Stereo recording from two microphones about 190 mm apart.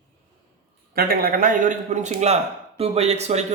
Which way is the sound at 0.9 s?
50° right (ahead or behind).